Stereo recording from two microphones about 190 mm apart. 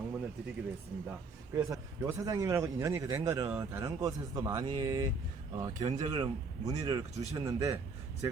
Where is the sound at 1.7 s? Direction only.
15° right (ahead or behind).